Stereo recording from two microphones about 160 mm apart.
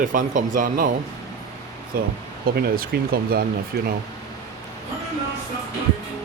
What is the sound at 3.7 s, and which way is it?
Speech, 90° right.